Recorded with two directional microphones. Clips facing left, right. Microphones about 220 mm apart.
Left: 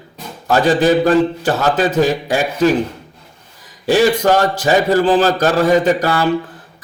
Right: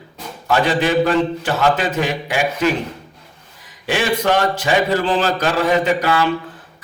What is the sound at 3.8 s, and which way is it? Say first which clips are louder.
A man's voice: left 6 dB; 40° left (ahead or behind).